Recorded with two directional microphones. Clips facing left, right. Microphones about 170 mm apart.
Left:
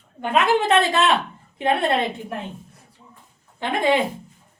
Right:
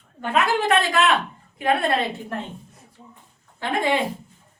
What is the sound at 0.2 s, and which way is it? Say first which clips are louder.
A woman's voice: left 2 dB; 20° left (ahead or behind).